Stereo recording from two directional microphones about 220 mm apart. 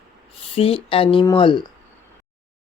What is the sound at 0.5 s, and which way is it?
Speech, 25° left (ahead or behind).